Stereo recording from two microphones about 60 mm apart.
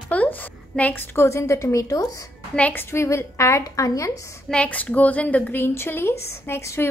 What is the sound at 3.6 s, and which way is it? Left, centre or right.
Speech, left.